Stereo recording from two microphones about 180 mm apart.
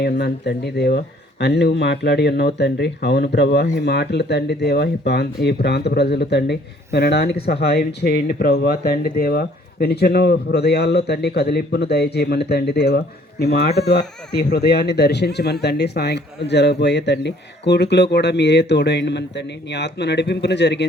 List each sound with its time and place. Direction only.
0.0 s speech: 65° left (ahead or behind)